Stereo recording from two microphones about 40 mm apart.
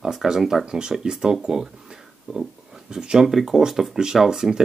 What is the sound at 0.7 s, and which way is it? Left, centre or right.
Speech, centre.